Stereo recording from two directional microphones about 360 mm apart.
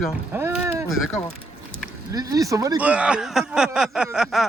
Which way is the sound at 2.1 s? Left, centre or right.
Centre.